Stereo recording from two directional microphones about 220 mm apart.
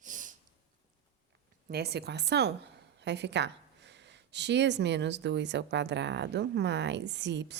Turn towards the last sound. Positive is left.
turn(degrees=-50)  # may be behind; listen again after turning